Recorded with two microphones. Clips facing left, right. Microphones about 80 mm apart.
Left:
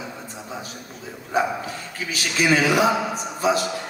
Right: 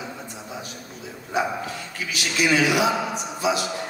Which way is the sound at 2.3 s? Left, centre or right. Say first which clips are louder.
Left 1 dB; left.